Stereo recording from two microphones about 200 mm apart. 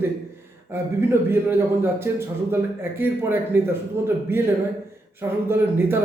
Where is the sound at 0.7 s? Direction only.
10° right (ahead or behind).